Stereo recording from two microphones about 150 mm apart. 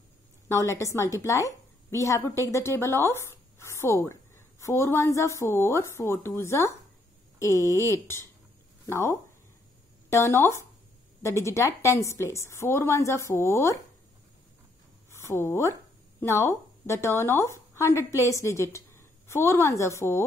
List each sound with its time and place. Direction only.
0.5 s a woman's voice: 20° left (ahead or behind)
15.0 s a woman's voice: 20° left (ahead or behind)